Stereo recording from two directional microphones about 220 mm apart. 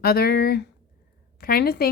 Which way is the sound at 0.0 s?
45° left (ahead or behind).